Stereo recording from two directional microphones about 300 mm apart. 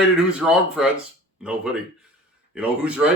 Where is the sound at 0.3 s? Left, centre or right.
Centre.